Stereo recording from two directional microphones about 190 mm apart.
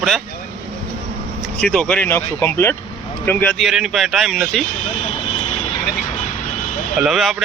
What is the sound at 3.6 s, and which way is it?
Speech, centre (ahead or behind).